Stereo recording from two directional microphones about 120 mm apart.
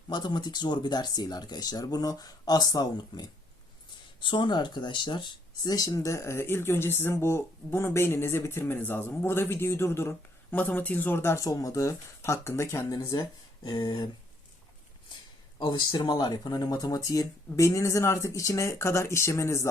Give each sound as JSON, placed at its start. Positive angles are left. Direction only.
{"t": 0.1, "sound": "speech", "side_deg": 35}
{"t": 15.5, "sound": "speech", "side_deg": 40}